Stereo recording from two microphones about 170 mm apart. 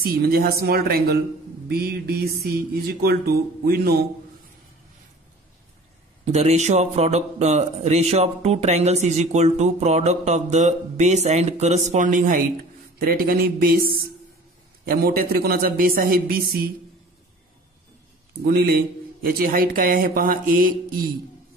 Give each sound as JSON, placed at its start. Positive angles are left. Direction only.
{"t": 0.0, "sound": "speech", "side_deg": -60}
{"t": 6.2, "sound": "a man's voice", "side_deg": -40}
{"t": 13.0, "sound": "speech", "side_deg": -60}
{"t": 18.4, "sound": "speech", "side_deg": -65}